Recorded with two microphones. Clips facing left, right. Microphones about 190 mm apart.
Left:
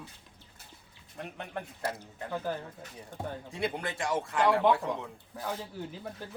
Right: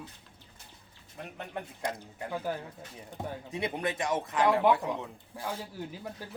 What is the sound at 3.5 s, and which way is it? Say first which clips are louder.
Speech: right 2 dB; 20° right (ahead or behind).